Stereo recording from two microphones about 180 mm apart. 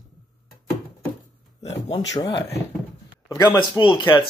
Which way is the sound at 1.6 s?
35° left (ahead or behind).